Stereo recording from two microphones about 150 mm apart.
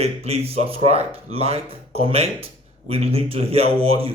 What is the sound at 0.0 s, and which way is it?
A man's voice, 45° right (ahead or behind).